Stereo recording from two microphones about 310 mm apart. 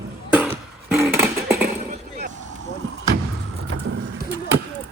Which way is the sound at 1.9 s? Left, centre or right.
Right.